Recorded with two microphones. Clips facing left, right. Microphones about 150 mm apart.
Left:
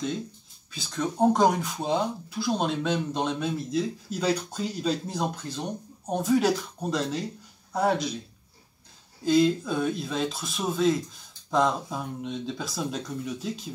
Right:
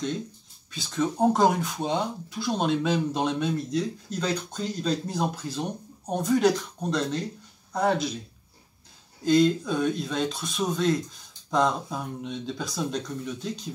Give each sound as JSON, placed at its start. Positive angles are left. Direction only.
{"t": 0.7, "sound": "speech", "side_deg": 0}
{"t": 9.2, "sound": "speech", "side_deg": 5}